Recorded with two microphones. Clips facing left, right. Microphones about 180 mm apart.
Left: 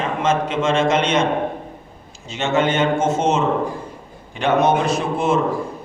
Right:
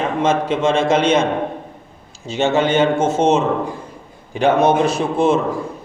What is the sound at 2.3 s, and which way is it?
A man's voice, 35° right (ahead or behind).